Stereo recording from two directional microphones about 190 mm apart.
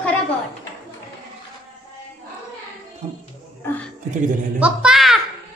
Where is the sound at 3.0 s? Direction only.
35° right (ahead or behind).